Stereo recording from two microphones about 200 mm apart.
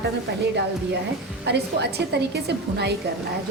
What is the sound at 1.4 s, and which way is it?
A woman's voice, 55° right (ahead or behind).